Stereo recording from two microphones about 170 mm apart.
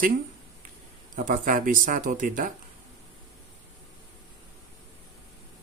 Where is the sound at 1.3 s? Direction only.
50° right (ahead or behind).